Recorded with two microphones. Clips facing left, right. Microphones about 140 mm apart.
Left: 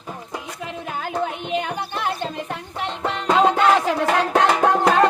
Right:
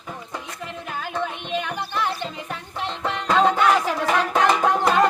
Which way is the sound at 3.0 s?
20° left (ahead or behind).